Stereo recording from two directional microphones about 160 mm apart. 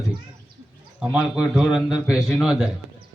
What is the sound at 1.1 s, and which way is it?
A man's voice, 5° right (ahead or behind).